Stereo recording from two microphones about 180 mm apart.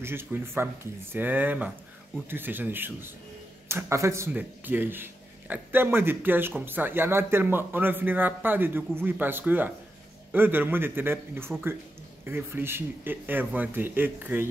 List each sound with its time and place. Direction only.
0.0 s speech: 10° right (ahead or behind)